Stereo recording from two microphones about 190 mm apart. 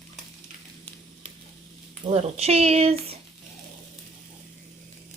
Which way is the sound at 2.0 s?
35° right (ahead or behind).